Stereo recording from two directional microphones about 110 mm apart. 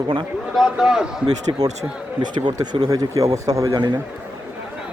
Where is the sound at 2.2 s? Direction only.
40° right (ahead or behind).